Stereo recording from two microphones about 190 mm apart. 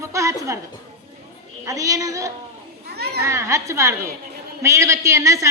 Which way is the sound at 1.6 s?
15° right (ahead or behind).